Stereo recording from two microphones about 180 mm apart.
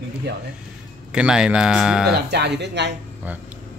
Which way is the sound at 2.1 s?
70° right (ahead or behind).